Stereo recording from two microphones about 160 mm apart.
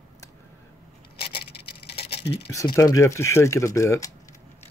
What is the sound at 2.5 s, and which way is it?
Speech, 20° left (ahead or behind).